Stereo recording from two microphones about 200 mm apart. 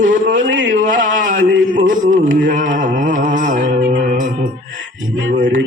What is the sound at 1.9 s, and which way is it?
Music, 40° right (ahead or behind).